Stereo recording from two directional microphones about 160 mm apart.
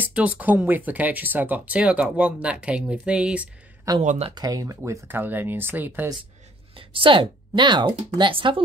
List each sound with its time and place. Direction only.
0.0 s speech: 10° right (ahead or behind)
4.0 s speech: 50° right (ahead or behind)
4.4 s speech: 20° right (ahead or behind)
6.7 s speech: 35° right (ahead or behind)